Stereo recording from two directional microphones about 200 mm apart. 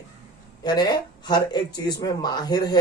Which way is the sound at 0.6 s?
20° left (ahead or behind).